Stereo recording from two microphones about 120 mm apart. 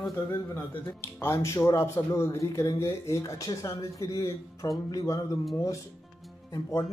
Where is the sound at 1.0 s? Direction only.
20° left (ahead or behind).